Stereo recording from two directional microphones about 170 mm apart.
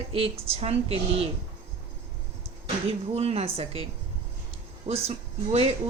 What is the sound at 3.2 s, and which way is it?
Speech, 35° right (ahead or behind).